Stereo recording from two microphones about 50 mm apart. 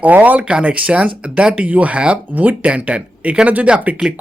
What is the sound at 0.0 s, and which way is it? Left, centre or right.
Speech, right.